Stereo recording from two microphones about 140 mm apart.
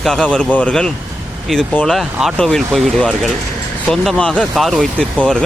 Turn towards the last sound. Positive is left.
turn(degrees=5)  # may be behind; listen again after turning